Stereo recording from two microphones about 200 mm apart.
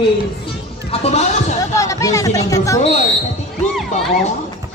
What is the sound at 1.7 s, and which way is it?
Speech, 15° left (ahead or behind).